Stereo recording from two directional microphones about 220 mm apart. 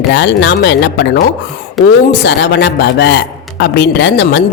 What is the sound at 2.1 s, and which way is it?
A woman's voice, 50° left (ahead or behind).